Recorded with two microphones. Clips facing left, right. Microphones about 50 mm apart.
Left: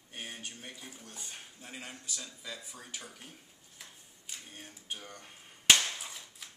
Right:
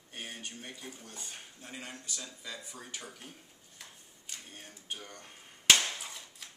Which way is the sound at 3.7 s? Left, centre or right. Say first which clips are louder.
Even; centre.